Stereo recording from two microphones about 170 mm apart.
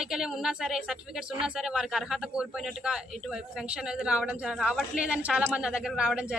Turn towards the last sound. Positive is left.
turn(degrees=-5)  # may be behind; listen again after turning